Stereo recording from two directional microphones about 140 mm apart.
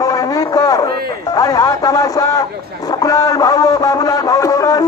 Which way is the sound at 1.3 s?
25° left (ahead or behind).